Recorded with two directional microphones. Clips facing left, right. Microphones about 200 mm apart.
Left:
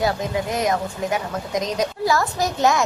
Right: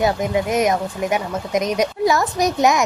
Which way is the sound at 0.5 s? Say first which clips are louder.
Right 4 dB; 20° right (ahead or behind).